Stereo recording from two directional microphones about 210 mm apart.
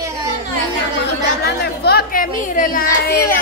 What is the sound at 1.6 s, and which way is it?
Speech, 50° left (ahead or behind).